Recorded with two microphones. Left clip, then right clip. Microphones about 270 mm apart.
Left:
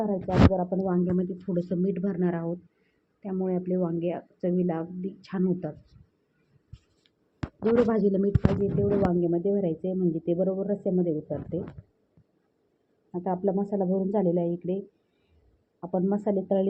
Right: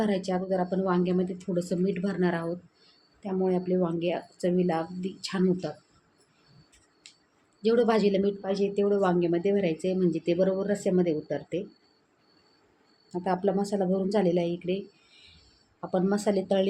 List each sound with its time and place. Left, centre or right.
0.0 s speech: right
0.9 s speech: centre
7.6 s speech: centre
13.1 s speech: centre
15.9 s speech: centre